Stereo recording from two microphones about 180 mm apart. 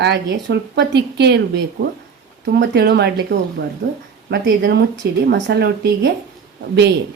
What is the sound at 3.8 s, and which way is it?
Speech, 80° right.